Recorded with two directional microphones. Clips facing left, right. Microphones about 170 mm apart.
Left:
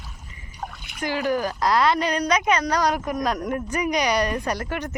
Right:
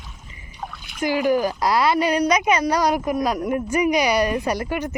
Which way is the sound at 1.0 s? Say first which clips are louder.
Right 4 dB; 10° right (ahead or behind).